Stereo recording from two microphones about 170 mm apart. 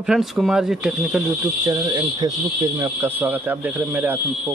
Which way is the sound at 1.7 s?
20° right (ahead or behind).